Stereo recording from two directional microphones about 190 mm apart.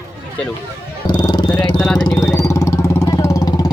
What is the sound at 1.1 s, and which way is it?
Vehicle, 20° left (ahead or behind).